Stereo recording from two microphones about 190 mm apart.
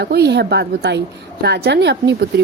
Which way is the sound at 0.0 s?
60° right (ahead or behind).